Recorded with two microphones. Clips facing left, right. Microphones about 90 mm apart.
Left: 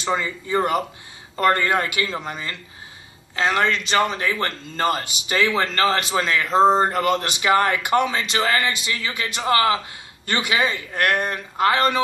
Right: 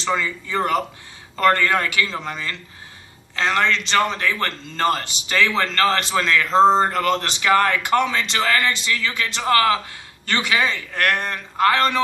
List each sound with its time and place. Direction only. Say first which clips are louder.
0.1 s speech: even; 20° left (ahead or behind)
0.6 s a man's voice: even; 10° left (ahead or behind)
1.4 s speech: right 1 dB; 20° left (ahead or behind)
2.0 s a man's voice: right 1 dB; 10° left (ahead or behind)